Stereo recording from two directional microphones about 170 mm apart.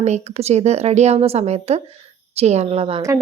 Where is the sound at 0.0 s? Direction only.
40° right (ahead or behind).